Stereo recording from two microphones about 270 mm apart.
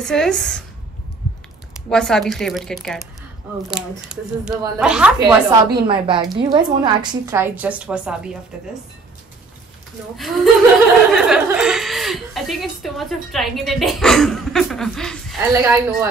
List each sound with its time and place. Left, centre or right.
0.0 s a woman's voice: centre
1.7 s a woman's voice: centre
10.1 s a woman's voice: centre
15.5 s speech: centre